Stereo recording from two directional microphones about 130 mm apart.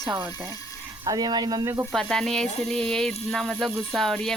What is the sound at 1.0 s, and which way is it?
Speech, 30° right (ahead or behind).